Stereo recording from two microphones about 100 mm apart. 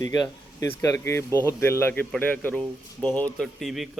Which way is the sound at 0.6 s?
30° left (ahead or behind).